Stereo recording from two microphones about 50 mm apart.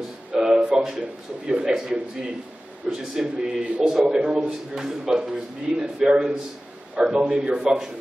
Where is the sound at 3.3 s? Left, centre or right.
Right.